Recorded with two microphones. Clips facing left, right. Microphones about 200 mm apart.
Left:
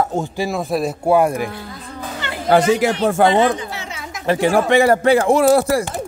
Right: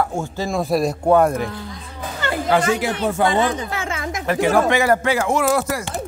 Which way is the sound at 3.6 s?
50° right (ahead or behind).